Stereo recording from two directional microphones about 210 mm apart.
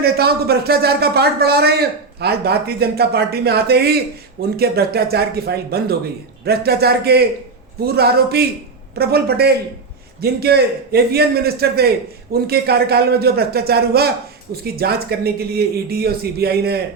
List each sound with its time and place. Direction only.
0.0 s a man's voice: 50° right (ahead or behind)